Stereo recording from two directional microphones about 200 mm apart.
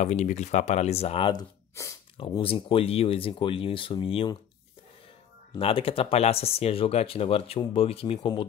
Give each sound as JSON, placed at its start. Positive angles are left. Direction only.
{"t": 0.0, "sound": "speech", "side_deg": 35}
{"t": 2.1, "sound": "speech", "side_deg": 30}
{"t": 5.6, "sound": "speech", "side_deg": 30}